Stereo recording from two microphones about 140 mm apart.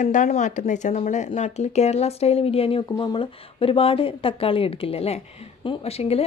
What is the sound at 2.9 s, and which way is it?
A woman's voice, 30° left (ahead or behind).